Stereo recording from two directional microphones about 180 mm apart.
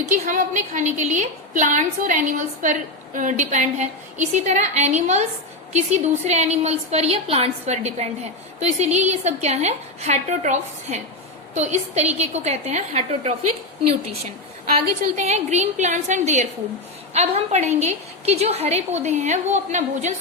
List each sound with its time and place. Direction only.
0.1 s a woman's voice: 45° right (ahead or behind)
15.0 s a woman's voice: 40° right (ahead or behind)